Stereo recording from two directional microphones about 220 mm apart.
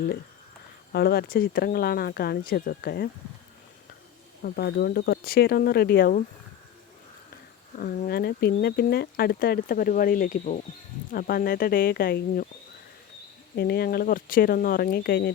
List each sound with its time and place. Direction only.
0.9 s speech: 45° left (ahead or behind)
4.4 s speech: 45° left (ahead or behind)
7.8 s speech: 45° left (ahead or behind)
13.6 s speech: 45° left (ahead or behind)